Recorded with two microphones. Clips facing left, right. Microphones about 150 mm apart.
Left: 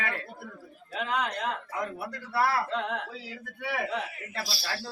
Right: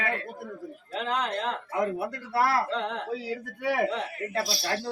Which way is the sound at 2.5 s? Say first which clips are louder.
Right 2 dB; 35° right (ahead or behind).